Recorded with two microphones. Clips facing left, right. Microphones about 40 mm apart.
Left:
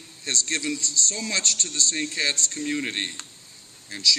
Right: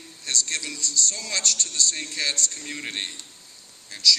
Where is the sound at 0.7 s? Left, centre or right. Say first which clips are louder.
Left 1 dB; left.